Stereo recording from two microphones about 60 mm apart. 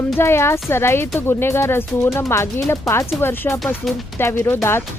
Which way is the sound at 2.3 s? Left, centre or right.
Left.